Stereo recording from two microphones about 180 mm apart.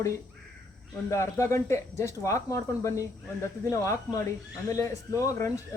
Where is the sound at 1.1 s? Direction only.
15° left (ahead or behind).